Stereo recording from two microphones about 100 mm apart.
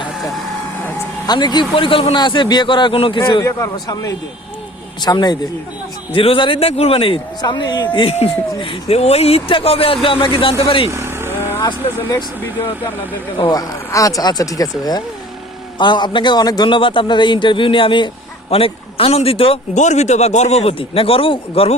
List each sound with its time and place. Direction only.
1.3 s speech: 45° left (ahead or behind); by 2.1 s 65° left (ahead or behind)
2.1 s a man's voice: 50° left (ahead or behind)
3.4 s speech: 35° left (ahead or behind)
4.9 s a man's voice: 45° left (ahead or behind)
6.1 s speech: 60° left (ahead or behind)
7.4 s a man's voice: 50° left (ahead or behind); by 10.8 s 65° left (ahead or behind)
10.8 s vehicle: 25° right (ahead or behind)
13.5 s a man's voice: 35° left (ahead or behind); by 18.1 s 55° left (ahead or behind)
18.5 s speech: 70° left (ahead or behind)
20.0 s speech: 90° left; by 21.8 s 75° left (ahead or behind)